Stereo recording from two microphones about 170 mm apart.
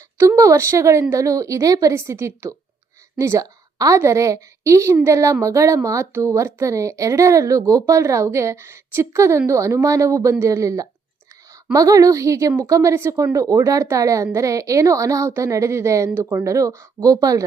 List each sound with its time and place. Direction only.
0.2 s a woman's voice: 15° right (ahead or behind)